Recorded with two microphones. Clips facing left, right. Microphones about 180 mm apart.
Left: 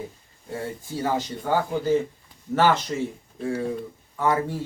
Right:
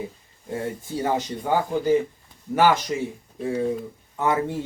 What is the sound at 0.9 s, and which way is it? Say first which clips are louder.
Speech: right 1 dB; 20° right (ahead or behind).